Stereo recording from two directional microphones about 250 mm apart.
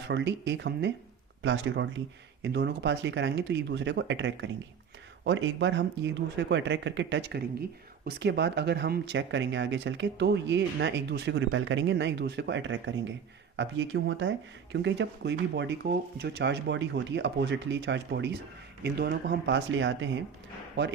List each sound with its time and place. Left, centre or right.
0.1 s speech: right